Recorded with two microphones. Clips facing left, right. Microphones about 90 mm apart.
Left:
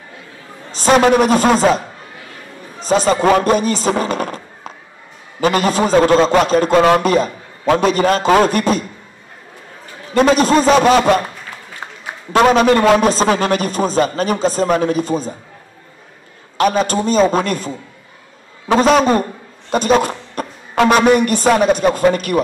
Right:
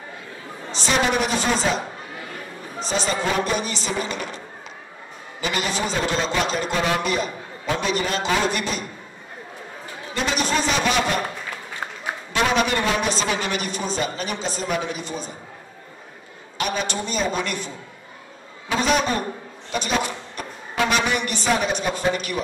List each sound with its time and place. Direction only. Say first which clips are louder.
0.7 s a man's voice: left 10 dB; 45° left (ahead or behind)
2.8 s a man's voice: left 10 dB; 40° left (ahead or behind)
10.1 s a man's voice: left 12 dB; 40° left (ahead or behind)
12.3 s a man's voice: left 10 dB; 45° left (ahead or behind)
16.5 s a man's voice: left 11 dB; 40° left (ahead or behind)
18.8 s a man's voice: left 9 dB; 40° left (ahead or behind)